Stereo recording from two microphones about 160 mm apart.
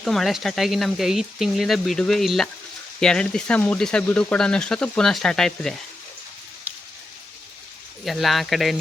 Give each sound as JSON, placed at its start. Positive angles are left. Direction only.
{"t": 0.0, "sound": "speech", "side_deg": 0}
{"t": 8.0, "sound": "speech", "side_deg": 0}